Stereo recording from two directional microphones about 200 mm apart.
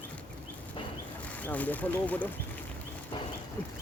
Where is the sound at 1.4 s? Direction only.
10° left (ahead or behind).